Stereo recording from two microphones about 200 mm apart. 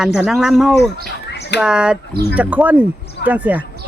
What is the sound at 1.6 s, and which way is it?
Speech, 5° right (ahead or behind).